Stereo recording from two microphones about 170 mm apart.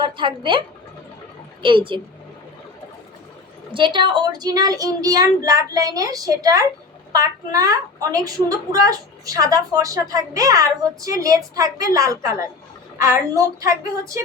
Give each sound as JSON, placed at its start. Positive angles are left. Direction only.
{"t": 0.0, "sound": "a woman's voice", "side_deg": -30}
{"t": 1.6, "sound": "a woman's voice", "side_deg": -30}
{"t": 3.7, "sound": "a woman's voice", "side_deg": -30}